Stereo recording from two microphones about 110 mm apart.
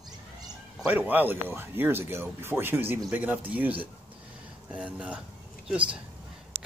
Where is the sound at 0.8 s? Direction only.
10° right (ahead or behind).